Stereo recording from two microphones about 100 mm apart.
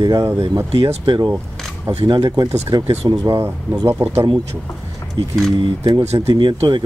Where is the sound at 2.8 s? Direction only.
90° right.